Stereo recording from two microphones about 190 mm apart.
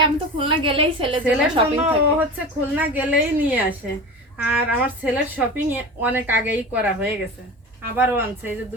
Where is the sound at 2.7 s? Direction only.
10° right (ahead or behind).